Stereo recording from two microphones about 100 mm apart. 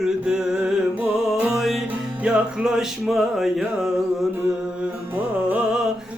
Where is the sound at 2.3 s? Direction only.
5° right (ahead or behind).